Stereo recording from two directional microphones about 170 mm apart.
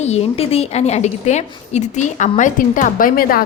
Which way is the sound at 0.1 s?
40° left (ahead or behind).